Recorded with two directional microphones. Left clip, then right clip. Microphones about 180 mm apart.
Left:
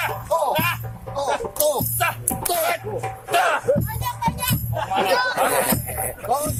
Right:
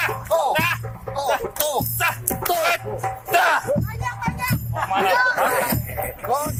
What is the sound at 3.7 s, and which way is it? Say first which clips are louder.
Music: left 2 dB; 45° left (ahead or behind).